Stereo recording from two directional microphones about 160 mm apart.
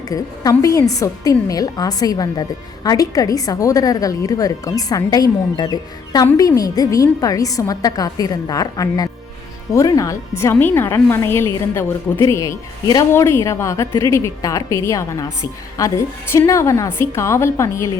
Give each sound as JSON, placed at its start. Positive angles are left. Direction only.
{"t": 0.1, "sound": "a woman's voice", "side_deg": 20}